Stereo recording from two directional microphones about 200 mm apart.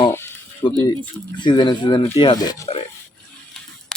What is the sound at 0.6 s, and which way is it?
Speech, 25° left (ahead or behind).